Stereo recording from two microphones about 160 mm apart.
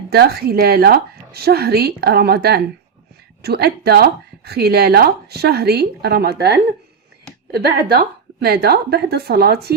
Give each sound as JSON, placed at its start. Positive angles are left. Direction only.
{"t": 0.1, "sound": "speech", "side_deg": -80}
{"t": 7.5, "sound": "speech", "side_deg": -75}